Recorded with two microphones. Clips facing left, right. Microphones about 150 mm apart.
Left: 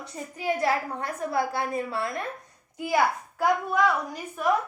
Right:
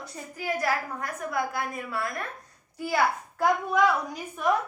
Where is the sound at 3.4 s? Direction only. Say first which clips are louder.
Even; centre (ahead or behind).